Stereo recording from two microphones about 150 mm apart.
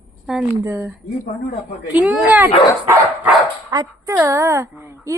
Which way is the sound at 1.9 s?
10° right (ahead or behind).